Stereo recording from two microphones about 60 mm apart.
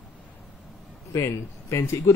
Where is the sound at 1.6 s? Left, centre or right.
Left.